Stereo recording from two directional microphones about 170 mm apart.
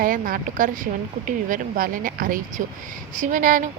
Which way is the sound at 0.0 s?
55° right (ahead or behind).